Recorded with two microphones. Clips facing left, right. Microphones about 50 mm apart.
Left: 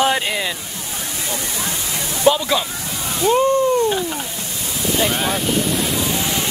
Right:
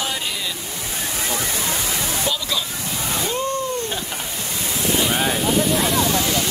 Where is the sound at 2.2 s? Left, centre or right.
Left.